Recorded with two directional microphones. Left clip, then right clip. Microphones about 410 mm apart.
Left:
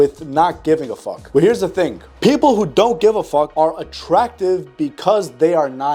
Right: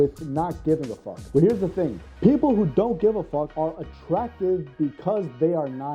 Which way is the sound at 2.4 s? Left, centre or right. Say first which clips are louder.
Left 9 dB; centre.